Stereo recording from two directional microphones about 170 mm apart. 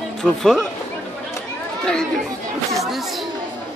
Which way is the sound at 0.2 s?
Centre (ahead or behind).